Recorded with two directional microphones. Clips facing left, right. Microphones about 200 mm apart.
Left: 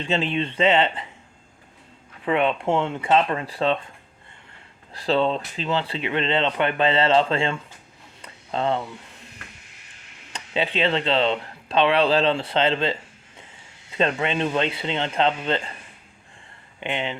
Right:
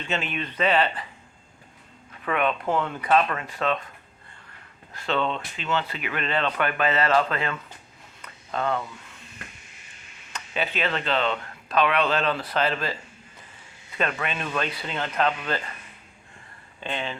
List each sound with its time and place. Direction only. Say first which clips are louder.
0.0 s speech: left 6 dB; 30° left (ahead or behind)
2.2 s speech: left 4 dB; 25° left (ahead or behind)
4.9 s speech: left 5 dB; 35° left (ahead or behind)
8.2 s a sound: left 3 dB; 30° left (ahead or behind)
10.3 s speech: left 4 dB; 25° left (ahead or behind)
16.8 s speech: left 3 dB; 20° left (ahead or behind)